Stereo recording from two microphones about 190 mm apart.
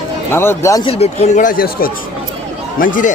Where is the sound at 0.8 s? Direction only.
30° left (ahead or behind).